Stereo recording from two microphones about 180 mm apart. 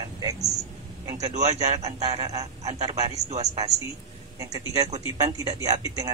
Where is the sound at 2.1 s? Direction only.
35° right (ahead or behind).